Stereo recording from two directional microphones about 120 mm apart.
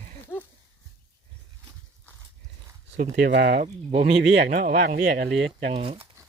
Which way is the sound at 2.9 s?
80° right.